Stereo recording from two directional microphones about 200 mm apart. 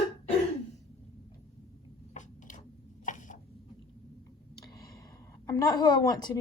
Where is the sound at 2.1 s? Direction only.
40° left (ahead or behind).